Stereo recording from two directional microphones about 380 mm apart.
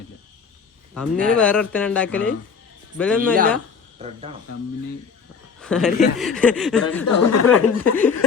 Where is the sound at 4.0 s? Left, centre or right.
Centre.